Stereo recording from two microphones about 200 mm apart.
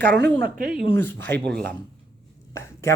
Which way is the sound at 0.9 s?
10° left (ahead or behind).